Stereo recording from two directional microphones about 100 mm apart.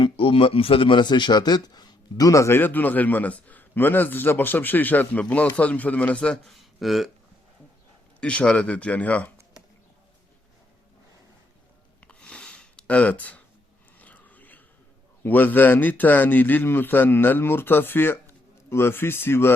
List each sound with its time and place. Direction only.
0.0 s speech: 65° left (ahead or behind); by 2.6 s 30° left (ahead or behind)
2.6 s a man's voice: 20° left (ahead or behind); by 7.1 s centre (ahead or behind)
8.2 s a man's voice: 10° left (ahead or behind)
11.9 s a sound: 10° left (ahead or behind)
15.2 s a man's voice: 20° left (ahead or behind)